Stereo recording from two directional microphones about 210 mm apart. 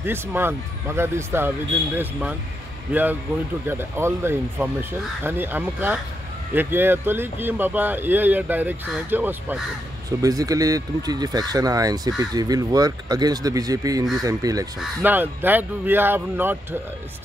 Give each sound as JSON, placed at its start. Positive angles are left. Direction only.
{"t": 0.0, "sound": "speech", "side_deg": -10}
{"t": 2.9, "sound": "speech", "side_deg": -10}